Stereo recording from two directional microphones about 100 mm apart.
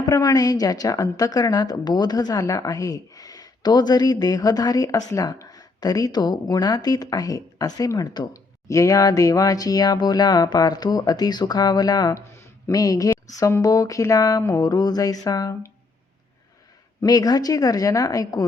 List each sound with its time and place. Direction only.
0.0 s a woman's voice: 40° left (ahead or behind)
8.6 s a woman's voice: 35° left (ahead or behind)
12.3 s a sound: 30° left (ahead or behind)
13.6 s a woman's voice: 35° left (ahead or behind)
17.1 s a woman's voice: 40° left (ahead or behind)